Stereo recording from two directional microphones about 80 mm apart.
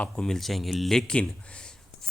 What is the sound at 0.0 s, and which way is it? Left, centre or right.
Speech, centre.